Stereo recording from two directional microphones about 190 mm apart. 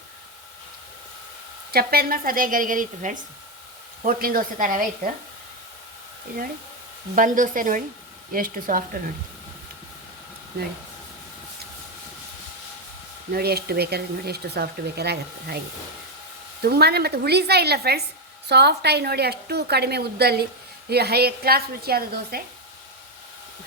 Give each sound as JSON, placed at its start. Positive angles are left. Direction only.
{"t": 1.7, "sound": "speech", "side_deg": -55}
{"t": 7.2, "sound": "speech", "side_deg": -45}
{"t": 13.3, "sound": "speech", "side_deg": -55}
{"t": 16.6, "sound": "speech", "side_deg": -55}